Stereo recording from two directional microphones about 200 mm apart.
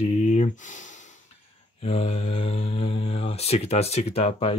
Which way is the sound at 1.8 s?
30° left (ahead or behind).